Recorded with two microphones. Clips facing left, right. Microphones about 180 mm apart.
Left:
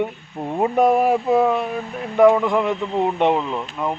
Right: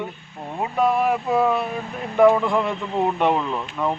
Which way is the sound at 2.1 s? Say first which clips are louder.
Left 2 dB; 15° left (ahead or behind).